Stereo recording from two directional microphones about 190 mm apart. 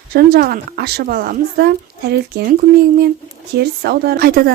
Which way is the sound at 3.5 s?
60° right (ahead or behind).